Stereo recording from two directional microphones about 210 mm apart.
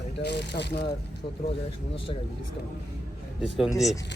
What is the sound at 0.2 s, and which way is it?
Speech, 55° left (ahead or behind).